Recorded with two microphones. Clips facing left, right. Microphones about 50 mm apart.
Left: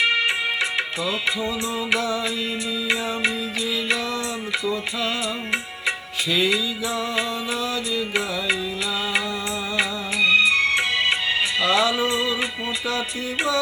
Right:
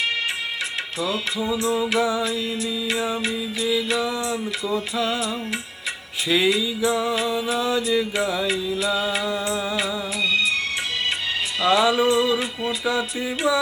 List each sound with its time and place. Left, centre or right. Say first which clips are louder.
2.0 s music: right 3 dB; centre
4.6 s music: right 3 dB; centre
6.3 s music: right 2 dB; centre
7.6 s mantra: right 6 dB; right
11.6 s music: right 4 dB; centre